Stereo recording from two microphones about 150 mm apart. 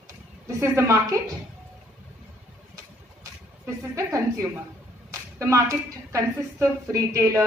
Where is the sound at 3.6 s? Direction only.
20° right (ahead or behind).